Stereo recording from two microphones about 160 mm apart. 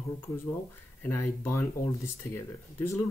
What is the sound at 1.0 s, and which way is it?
Speech, 15° left (ahead or behind).